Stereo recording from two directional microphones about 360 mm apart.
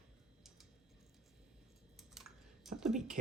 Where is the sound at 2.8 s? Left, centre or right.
Centre.